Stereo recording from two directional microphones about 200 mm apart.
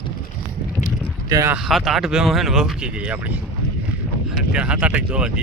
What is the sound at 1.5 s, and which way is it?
Speech, centre (ahead or behind).